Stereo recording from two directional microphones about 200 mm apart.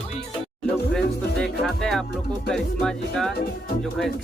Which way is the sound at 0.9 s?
5° left (ahead or behind).